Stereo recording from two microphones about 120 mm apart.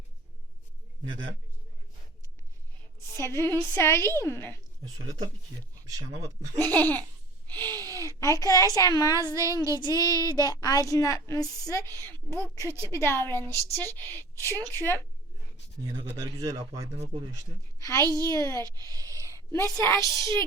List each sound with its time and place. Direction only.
3.2 s a woman's voice: 20° left (ahead or behind)
5.0 s speech: 30° right (ahead or behind)
6.6 s laughter: 15° left (ahead or behind)
7.4 s a woman's voice: 15° left (ahead or behind); by 9.3 s 35° left (ahead or behind)
9.3 s speech: 25° right (ahead or behind)
10.2 s a woman's voice: 30° left (ahead or behind)
12.5 s speech: 20° right (ahead or behind)
12.9 s a woman's voice: 20° left (ahead or behind)
16.0 s speech: 35° right (ahead or behind)
18.0 s speech: 30° right (ahead or behind)
18.3 s a woman's voice: 25° left (ahead or behind)
18.6 s speech: 30° right (ahead or behind)
19.1 s a sound: 20° left (ahead or behind)
19.7 s a woman's voice: 20° left (ahead or behind)